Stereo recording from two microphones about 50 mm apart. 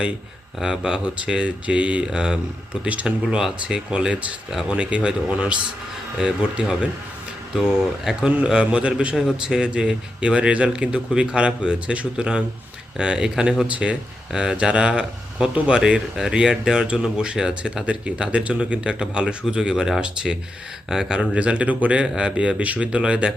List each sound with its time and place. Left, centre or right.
0.6 s speech: centre
9.1 s speech: centre
15.8 s speech: centre
21.3 s speech: right